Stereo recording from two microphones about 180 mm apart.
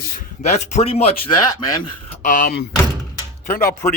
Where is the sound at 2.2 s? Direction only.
50° left (ahead or behind).